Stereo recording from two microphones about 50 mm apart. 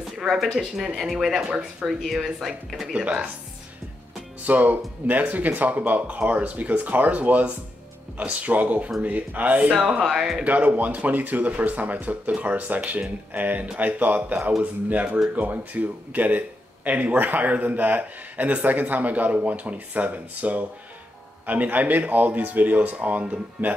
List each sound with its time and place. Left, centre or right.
0.4 s speech: centre
4.5 s speech: right
9.8 s speech: centre
10.0 s speech: centre
10.4 s speech: right